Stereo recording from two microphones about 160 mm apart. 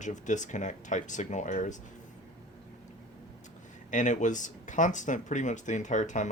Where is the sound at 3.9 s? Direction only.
50° left (ahead or behind).